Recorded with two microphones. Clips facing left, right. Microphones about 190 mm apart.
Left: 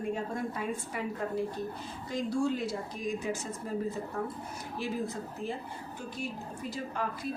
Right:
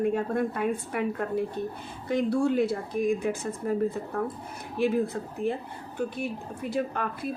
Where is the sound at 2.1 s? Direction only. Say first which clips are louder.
Right 6 dB; 60° right (ahead or behind).